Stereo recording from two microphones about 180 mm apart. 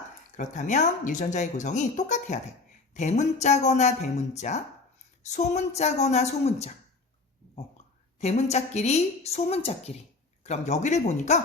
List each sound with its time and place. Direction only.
0.3 s a woman's voice: 45° left (ahead or behind)
8.2 s a woman's voice: 35° left (ahead or behind)